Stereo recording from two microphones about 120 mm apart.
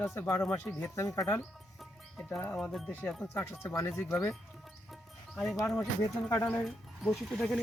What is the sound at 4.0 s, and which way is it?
Speech, 25° left (ahead or behind).